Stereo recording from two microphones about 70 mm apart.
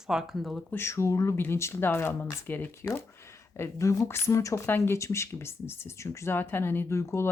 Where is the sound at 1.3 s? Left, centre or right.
Left.